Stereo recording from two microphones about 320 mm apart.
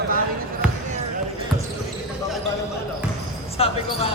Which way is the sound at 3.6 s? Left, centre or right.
Centre.